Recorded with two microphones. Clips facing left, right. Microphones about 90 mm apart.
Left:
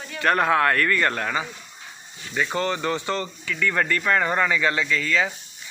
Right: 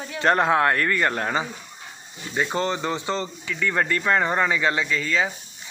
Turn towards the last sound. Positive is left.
turn(degrees=-20)  # may be behind; listen again after turning